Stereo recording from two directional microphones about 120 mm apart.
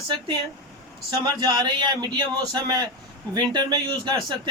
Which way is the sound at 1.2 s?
35° right (ahead or behind).